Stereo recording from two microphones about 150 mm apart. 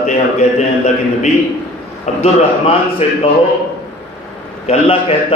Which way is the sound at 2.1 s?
50° left (ahead or behind).